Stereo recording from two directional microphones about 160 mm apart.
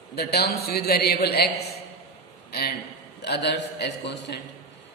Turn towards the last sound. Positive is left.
turn(degrees=90)